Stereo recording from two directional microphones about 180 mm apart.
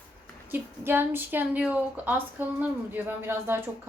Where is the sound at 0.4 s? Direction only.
10° right (ahead or behind).